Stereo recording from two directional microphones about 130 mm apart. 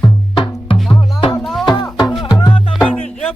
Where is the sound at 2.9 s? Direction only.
Centre (ahead or behind).